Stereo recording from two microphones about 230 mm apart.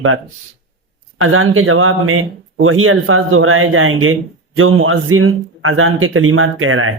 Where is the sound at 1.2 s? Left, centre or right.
Right.